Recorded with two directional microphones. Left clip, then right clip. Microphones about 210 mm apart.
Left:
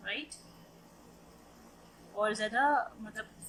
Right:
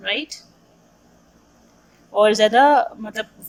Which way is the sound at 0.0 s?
35° right (ahead or behind).